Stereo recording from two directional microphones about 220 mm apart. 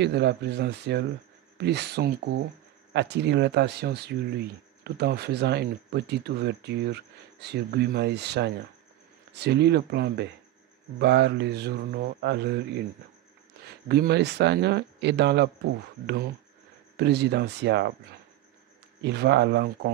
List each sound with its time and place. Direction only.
0.0 s speech: 50° right (ahead or behind)
13.8 s speech: 45° right (ahead or behind)
16.9 s speech: 50° right (ahead or behind)
19.0 s speech: 50° right (ahead or behind)